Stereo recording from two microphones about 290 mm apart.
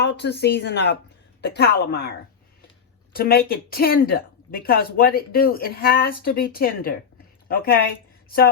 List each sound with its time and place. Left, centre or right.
0.0 s a woman's voice: left